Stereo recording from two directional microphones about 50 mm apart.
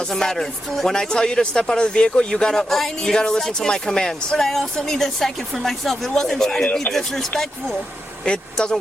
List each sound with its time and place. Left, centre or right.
0.1 s speech: centre
8.2 s speech: centre